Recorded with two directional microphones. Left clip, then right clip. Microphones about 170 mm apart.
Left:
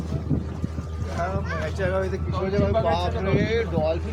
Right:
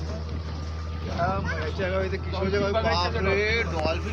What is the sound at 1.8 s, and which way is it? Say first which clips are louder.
Speech: left 2 dB; 35° left (ahead or behind).